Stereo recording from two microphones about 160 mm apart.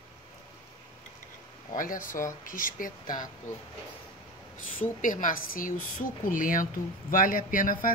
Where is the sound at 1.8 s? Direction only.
55° left (ahead or behind).